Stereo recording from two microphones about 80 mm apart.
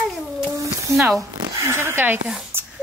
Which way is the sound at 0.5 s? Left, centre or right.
Right.